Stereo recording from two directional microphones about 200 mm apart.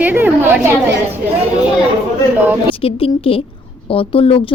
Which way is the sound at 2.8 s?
30° left (ahead or behind).